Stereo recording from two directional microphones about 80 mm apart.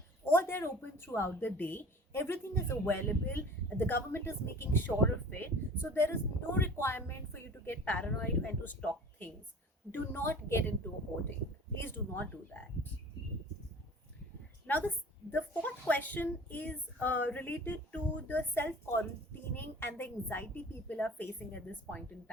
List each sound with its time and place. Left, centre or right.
0.3 s speech: left
7.9 s speech: centre
9.9 s speech: left
14.7 s a woman's voice: left